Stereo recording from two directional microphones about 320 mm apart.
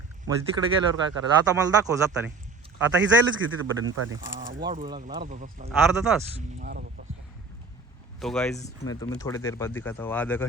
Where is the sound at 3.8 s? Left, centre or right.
Right.